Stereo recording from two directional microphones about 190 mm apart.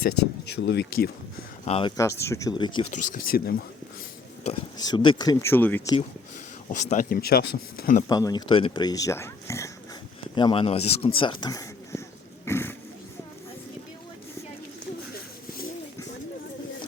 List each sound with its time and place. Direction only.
0.6 s speech: 60° left (ahead or behind)
1.6 s speech: 30° left (ahead or behind)
2.0 s speech: 15° left (ahead or behind)
2.9 s speech: 50° left (ahead or behind)
4.8 s speech: 25° left (ahead or behind)
6.7 s speech: 40° left (ahead or behind)
8.0 s speech: 20° left (ahead or behind)
10.3 s speech: 25° left (ahead or behind)
12.5 s a sound: 10° left (ahead or behind)